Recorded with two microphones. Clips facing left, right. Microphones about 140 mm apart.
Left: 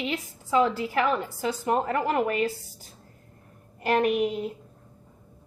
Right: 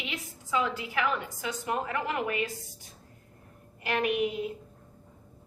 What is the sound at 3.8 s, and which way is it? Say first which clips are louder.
Speech: left 5 dB; 40° left (ahead or behind).